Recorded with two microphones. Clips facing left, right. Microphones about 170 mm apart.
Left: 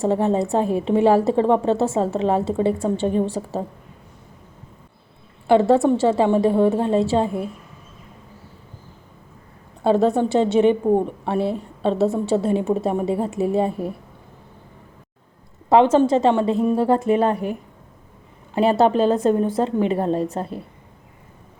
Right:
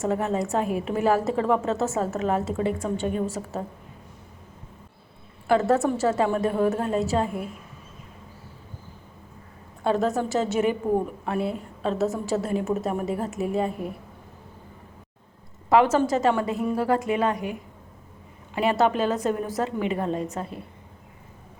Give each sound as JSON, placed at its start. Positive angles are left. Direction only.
{"t": 0.0, "sound": "a woman's voice", "side_deg": 30}
{"t": 5.5, "sound": "a woman's voice", "side_deg": 30}
{"t": 9.8, "sound": "a woman's voice", "side_deg": 30}
{"t": 15.7, "sound": "a woman's voice", "side_deg": 25}